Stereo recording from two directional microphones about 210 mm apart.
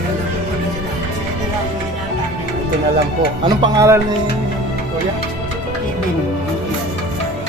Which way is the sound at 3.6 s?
15° right (ahead or behind).